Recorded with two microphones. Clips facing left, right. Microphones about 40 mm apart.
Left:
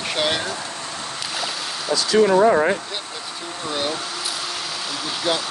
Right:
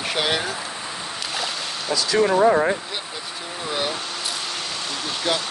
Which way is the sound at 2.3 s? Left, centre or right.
Centre.